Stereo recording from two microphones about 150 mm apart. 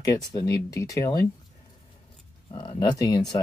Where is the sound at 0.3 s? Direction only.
25° left (ahead or behind).